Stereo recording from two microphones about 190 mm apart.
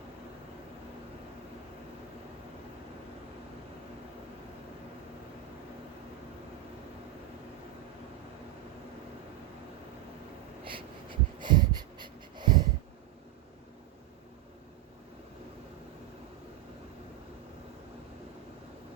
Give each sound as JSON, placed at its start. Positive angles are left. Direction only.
{"t": 10.6, "sound": "wheeze", "side_deg": -25}